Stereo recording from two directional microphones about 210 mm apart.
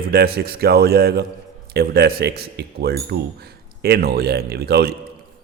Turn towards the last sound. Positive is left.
turn(degrees=-50)  # may be behind; listen again after turning